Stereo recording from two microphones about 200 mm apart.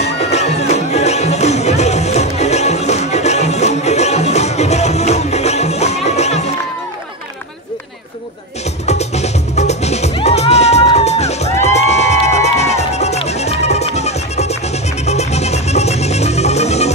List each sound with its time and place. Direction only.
0.0 s music: 35° left (ahead or behind)
8.8 s music: 35° left (ahead or behind)